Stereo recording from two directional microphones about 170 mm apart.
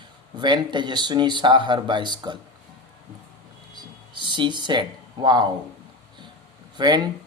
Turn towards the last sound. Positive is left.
turn(degrees=-25)  # may be behind; listen again after turning